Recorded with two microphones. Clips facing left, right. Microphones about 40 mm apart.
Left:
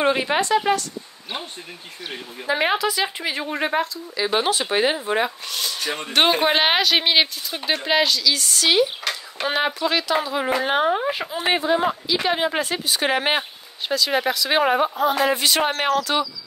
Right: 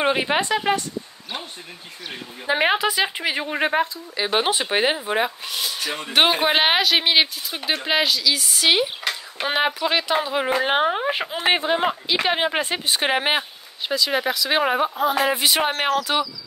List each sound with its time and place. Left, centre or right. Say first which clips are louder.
0.0 s speech: left 1 dB; centre
2.4 s a woman's voice: right 1 dB; right
11.1 s speech: right 1 dB; right
13.4 s speech: even; centre
15.2 s speech: even; centre